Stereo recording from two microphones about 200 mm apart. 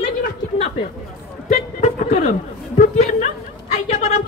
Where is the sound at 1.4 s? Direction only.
35° left (ahead or behind).